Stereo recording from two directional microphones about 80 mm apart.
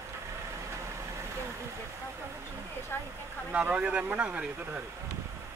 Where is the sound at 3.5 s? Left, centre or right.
Centre.